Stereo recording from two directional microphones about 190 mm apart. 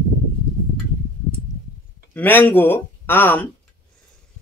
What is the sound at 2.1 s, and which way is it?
Speech, 10° left (ahead or behind).